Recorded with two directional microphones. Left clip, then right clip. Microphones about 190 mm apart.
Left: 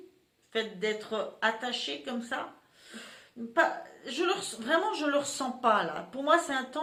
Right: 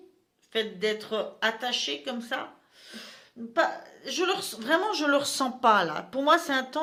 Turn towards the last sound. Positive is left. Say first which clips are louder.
# right 3 dB
turn(degrees=-45)  # may be behind; listen again after turning